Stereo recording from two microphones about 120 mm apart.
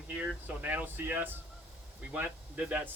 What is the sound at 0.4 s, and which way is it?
Speech, 15° right (ahead or behind).